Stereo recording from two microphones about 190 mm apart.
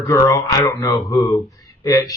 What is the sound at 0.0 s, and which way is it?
A man's voice, 15° left (ahead or behind).